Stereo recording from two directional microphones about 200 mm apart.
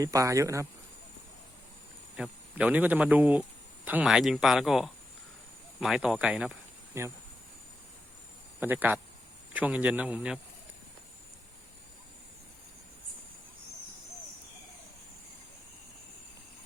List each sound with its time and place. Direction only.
0.0 s speech: 15° right (ahead or behind)
2.1 s speech: 5° right (ahead or behind)
8.6 s speech: 10° right (ahead or behind)